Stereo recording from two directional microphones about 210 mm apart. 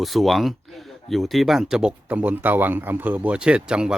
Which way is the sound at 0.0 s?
Centre (ahead or behind).